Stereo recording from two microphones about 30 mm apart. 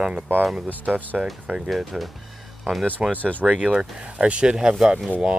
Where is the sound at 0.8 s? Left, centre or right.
Right.